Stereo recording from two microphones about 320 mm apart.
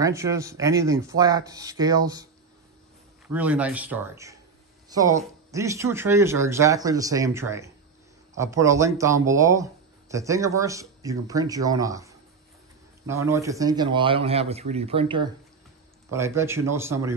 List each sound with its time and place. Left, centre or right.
0.0 s speech: centre
3.3 s speech: centre